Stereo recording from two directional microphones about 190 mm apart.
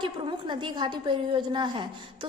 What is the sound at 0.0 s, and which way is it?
A woman's voice, 25° right (ahead or behind).